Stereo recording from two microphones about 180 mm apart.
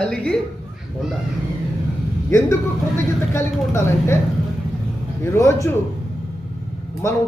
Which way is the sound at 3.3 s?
15° left (ahead or behind).